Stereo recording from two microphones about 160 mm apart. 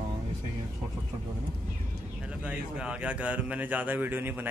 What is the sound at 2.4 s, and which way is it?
Speech, 5° right (ahead or behind).